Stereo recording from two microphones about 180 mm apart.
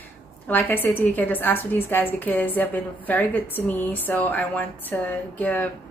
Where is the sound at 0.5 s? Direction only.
10° left (ahead or behind).